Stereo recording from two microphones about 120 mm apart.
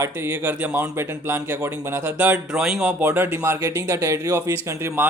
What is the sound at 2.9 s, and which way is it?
Speech, 15° right (ahead or behind).